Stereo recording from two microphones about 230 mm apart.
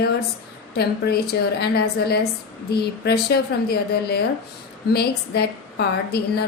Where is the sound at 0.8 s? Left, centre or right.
Left.